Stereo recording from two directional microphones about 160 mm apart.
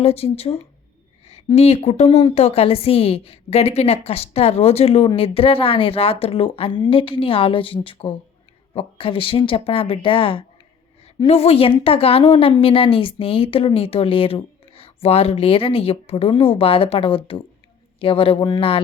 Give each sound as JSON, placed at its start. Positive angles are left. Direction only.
{"t": 0.0, "sound": "a woman's voice", "side_deg": 40}